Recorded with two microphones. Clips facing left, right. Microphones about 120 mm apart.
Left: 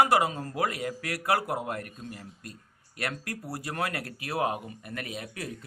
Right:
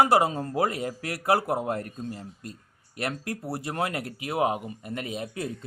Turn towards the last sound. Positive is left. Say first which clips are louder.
# right 5 dB
turn(degrees=-25)  # may be behind; listen again after turning